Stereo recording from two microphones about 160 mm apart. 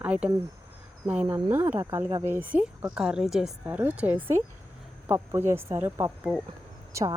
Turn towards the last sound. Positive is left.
turn(degrees=-20)  # may be behind; listen again after turning